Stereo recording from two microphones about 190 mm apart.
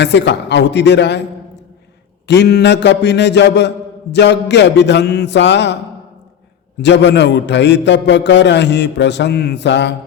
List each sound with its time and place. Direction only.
0.0 s a man's voice: 65° left (ahead or behind)
2.2 s a man's voice: 65° left (ahead or behind)
6.8 s a man's voice: 65° left (ahead or behind)